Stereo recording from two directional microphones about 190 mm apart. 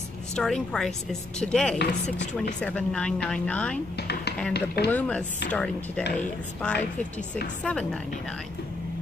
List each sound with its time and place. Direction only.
0.4 s a woman's voice: 5° left (ahead or behind)
4.1 s a sound: 60° left (ahead or behind)
4.6 s speech: 60° left (ahead or behind)
4.9 s a woman's voice: 5° left (ahead or behind)